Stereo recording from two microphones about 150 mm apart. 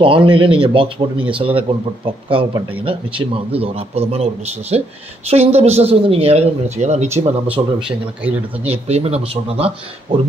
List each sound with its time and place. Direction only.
0.0 s a man's voice: 35° right (ahead or behind)
7.6 s speech: 25° right (ahead or behind)
8.2 s speech: 10° right (ahead or behind)
8.6 s speech: 45° right (ahead or behind)